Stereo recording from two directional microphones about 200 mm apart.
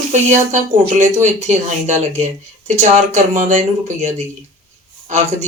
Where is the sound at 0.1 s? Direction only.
35° right (ahead or behind).